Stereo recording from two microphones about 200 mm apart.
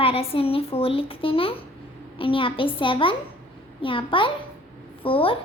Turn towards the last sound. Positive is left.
turn(degrees=25)  # may be behind; listen again after turning